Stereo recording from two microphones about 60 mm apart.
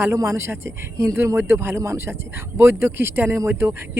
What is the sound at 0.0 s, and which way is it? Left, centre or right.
Speech, right.